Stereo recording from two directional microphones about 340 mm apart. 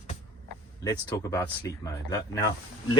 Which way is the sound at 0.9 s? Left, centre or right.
Centre.